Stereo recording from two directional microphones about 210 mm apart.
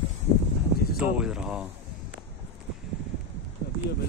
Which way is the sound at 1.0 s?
5° right (ahead or behind).